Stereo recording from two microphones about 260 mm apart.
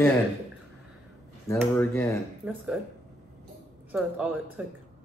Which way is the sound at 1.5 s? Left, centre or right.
Centre.